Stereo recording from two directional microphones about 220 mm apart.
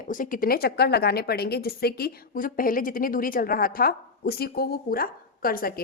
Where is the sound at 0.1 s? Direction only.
40° left (ahead or behind).